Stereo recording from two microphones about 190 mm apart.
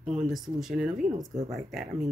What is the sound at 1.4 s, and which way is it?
Speech, 35° right (ahead or behind).